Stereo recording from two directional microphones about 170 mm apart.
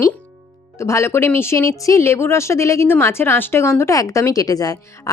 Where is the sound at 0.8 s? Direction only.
15° left (ahead or behind).